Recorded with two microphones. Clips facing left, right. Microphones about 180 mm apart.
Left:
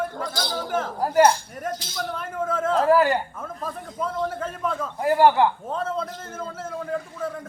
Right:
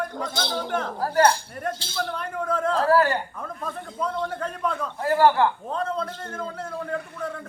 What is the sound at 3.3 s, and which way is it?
A man's voice, centre (ahead or behind).